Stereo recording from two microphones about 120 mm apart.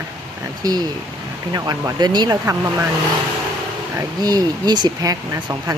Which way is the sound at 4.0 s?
35° right (ahead or behind).